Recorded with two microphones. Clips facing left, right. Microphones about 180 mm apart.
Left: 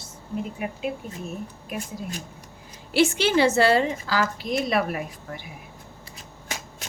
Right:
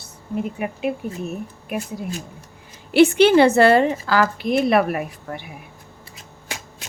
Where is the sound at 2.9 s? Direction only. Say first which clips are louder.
Right 8 dB; 60° right (ahead or behind).